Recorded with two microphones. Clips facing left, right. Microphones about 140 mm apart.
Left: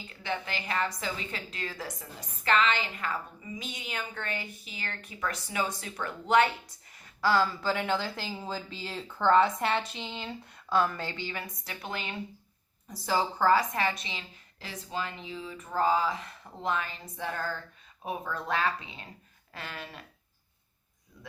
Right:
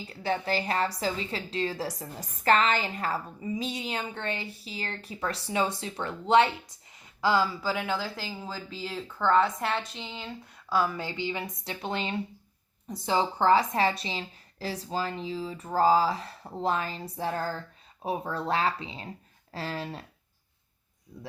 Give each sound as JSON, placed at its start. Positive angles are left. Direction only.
{"t": 0.1, "sound": "a woman's voice", "side_deg": -35}
{"t": 21.1, "sound": "speech", "side_deg": -30}